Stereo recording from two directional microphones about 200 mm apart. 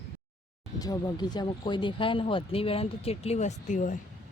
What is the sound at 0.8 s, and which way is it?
Speech, 20° left (ahead or behind).